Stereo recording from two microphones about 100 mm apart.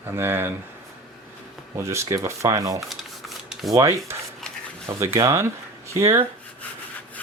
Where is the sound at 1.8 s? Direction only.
30° right (ahead or behind).